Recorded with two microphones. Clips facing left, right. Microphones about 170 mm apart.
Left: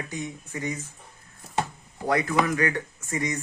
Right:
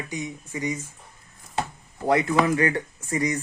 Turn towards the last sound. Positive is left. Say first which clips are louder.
# right 4 dB
turn(degrees=-30)  # may be behind; listen again after turning